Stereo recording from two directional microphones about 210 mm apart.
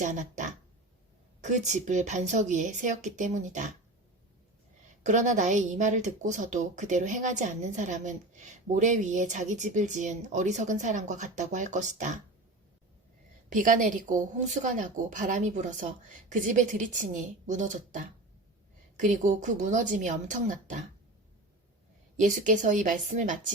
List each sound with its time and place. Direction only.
0.0 s speech: 35° right (ahead or behind)
5.0 s speech: 35° right (ahead or behind)
13.5 s speech: 40° right (ahead or behind)
22.2 s speech: 35° right (ahead or behind)